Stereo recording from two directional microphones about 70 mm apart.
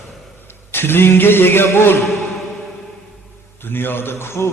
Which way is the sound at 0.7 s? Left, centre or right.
Left.